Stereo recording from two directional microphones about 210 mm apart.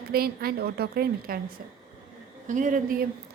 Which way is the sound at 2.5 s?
40° right (ahead or behind).